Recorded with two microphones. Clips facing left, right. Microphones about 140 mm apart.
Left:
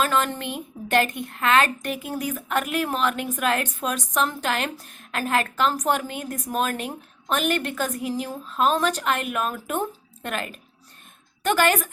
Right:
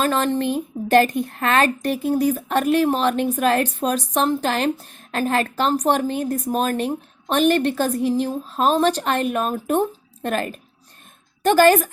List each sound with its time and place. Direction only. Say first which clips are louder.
0.0 s a woman's voice: right 4 dB; 35° right (ahead or behind)